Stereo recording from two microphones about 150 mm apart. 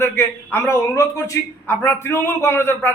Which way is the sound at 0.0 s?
15° left (ahead or behind).